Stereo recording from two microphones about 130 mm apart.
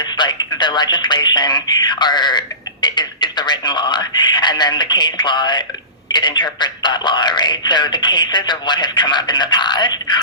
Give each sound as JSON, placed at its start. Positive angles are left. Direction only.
{"t": 0.0, "sound": "a man's voice", "side_deg": 35}